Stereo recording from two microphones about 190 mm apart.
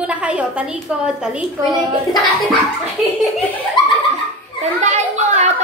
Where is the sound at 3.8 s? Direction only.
25° left (ahead or behind).